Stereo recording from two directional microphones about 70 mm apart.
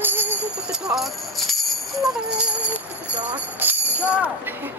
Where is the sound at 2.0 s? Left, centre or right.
Centre.